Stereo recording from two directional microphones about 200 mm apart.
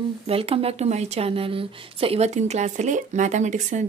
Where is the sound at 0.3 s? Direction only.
30° right (ahead or behind).